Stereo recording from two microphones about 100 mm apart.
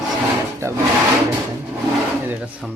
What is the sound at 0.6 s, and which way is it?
Speech, 30° right (ahead or behind).